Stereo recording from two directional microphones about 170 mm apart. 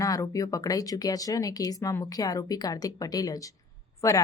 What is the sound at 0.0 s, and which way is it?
A woman's voice, 20° left (ahead or behind).